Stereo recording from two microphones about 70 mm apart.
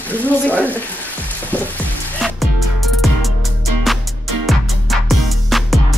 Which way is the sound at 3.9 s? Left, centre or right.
Centre.